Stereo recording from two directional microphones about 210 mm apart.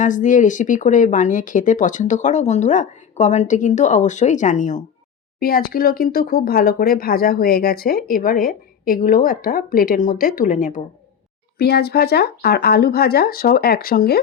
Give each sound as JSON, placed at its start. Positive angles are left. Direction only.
{"t": 0.0, "sound": "speech", "side_deg": 35}